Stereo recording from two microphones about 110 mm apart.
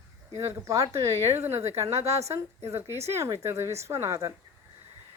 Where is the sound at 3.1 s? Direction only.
25° right (ahead or behind).